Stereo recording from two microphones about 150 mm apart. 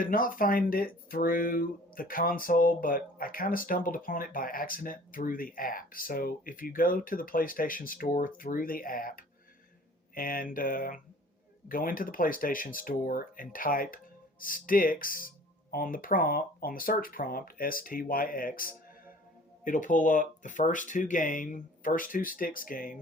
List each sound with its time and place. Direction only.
0.0 s speech: 70° left (ahead or behind)
19.6 s speech: 60° left (ahead or behind)